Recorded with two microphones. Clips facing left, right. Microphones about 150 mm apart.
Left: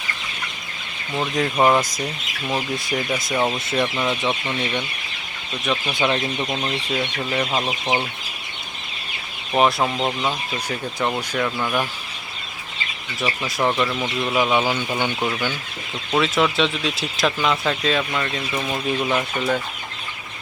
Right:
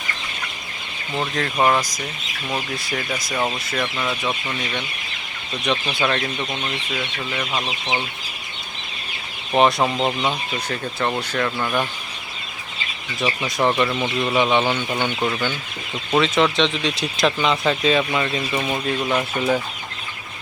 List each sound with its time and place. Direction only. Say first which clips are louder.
1.5 s speech: left 1 dB; 5° left (ahead or behind)
2.7 s speech: left 3 dB; 20° left (ahead or behind)
3.3 s speech: left 3 dB; 10° left (ahead or behind)
5.6 s speech: right 1 dB; 5° left (ahead or behind)
5.9 s speech: left 1 dB; 15° left (ahead or behind)
6.4 s speech: left 2 dB; 5° left (ahead or behind)
6.9 s speech: left 6 dB; 35° left (ahead or behind)
7.6 s speech: left 3 dB; 15° left (ahead or behind)
9.6 s speech: right 1 dB; 5° left (ahead or behind)
13.2 s speech: right 2 dB; centre (ahead or behind)